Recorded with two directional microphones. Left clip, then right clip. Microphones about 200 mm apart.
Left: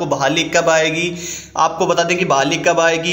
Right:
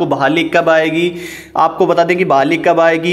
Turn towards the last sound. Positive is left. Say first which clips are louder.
# right 3 dB
turn(degrees=-30)  # may be behind; listen again after turning